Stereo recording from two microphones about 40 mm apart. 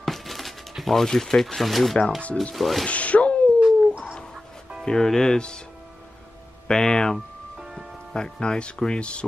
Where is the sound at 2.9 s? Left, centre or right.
Left.